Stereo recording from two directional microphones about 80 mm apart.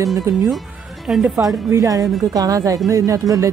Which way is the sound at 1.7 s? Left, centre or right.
Right.